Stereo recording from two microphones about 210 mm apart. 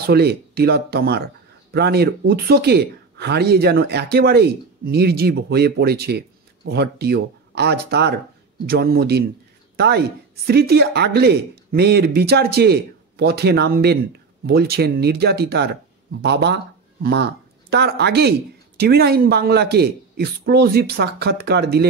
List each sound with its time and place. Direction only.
0.0 s speech: 50° right (ahead or behind)